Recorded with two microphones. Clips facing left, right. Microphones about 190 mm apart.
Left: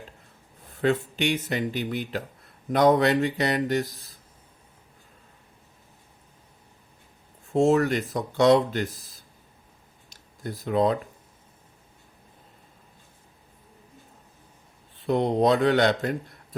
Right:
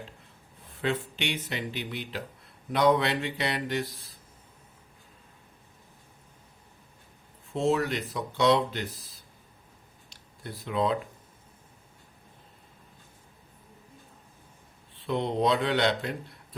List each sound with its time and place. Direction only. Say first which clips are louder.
0.8 s speech: left 6 dB; 45° left (ahead or behind)
7.5 s speech: left 6 dB; 45° left (ahead or behind)
10.1 s a sound: left 6 dB; 45° left (ahead or behind)
15.0 s speech: left 5 dB; 45° left (ahead or behind)